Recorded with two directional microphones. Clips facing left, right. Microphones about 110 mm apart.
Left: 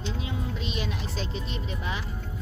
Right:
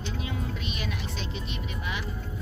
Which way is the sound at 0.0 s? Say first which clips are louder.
Left 1 dB; 25° left (ahead or behind).